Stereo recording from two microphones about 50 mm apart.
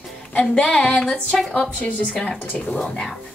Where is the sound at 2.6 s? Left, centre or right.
Centre.